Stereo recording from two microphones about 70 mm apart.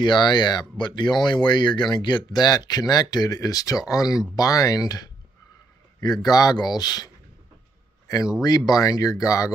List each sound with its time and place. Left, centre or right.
0.0 s speech: left
6.2 s speech: left
8.4 s speech: left